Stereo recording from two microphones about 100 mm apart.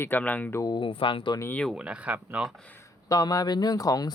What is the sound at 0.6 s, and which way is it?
Speech, 50° left (ahead or behind).